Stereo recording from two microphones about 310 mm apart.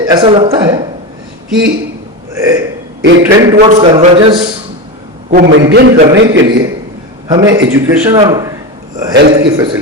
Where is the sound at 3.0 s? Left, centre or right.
Right.